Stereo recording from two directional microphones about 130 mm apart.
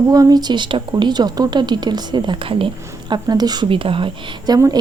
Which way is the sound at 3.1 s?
30° right (ahead or behind).